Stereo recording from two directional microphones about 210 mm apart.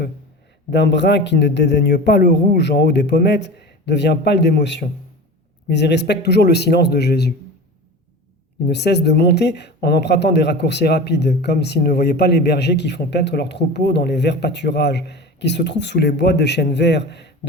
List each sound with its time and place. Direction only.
0.7 s speech: 55° left (ahead or behind)
8.6 s speech: 55° left (ahead or behind)